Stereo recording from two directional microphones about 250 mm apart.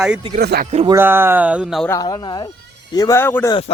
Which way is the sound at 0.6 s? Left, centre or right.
Right.